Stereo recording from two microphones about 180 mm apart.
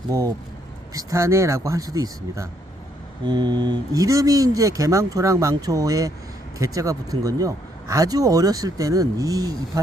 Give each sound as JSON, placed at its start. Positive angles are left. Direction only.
{"t": 0.1, "sound": "speech", "side_deg": -15}